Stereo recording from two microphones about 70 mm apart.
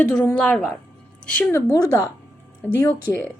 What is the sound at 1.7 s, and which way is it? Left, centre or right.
Speech, left.